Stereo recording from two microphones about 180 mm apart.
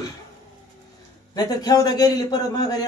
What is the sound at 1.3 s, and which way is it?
A man's voice, 20° left (ahead or behind).